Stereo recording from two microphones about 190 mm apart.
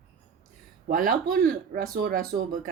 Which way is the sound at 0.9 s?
45° right (ahead or behind).